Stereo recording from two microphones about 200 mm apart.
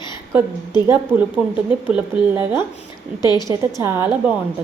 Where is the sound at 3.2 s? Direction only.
20° left (ahead or behind).